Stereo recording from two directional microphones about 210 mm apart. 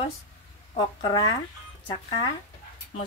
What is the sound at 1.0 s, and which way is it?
Speech, 20° left (ahead or behind).